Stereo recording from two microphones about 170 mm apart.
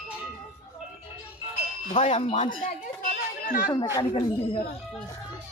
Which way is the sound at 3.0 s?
55° left (ahead or behind).